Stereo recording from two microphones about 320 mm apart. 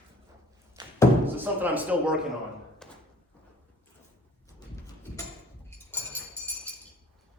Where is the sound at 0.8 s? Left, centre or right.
Centre.